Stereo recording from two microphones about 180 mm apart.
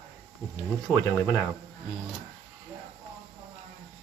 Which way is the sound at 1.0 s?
10° left (ahead or behind).